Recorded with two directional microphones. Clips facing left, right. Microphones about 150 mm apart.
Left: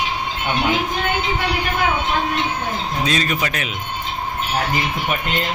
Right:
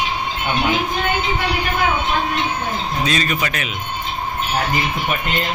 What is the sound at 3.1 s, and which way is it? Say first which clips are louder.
Speech: left 1 dB; 30° left (ahead or behind).